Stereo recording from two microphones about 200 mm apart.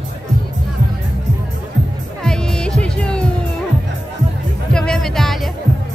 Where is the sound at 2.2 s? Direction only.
5° left (ahead or behind).